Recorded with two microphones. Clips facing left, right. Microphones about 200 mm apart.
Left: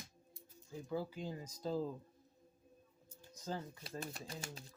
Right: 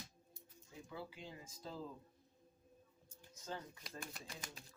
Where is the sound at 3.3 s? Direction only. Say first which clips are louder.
Left 5 dB; 35° left (ahead or behind).